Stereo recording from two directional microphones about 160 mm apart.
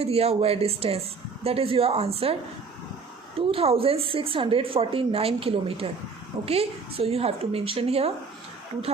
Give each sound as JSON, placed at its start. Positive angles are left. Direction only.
{"t": 0.0, "sound": "speech", "side_deg": -40}
{"t": 3.3, "sound": "speech", "side_deg": -35}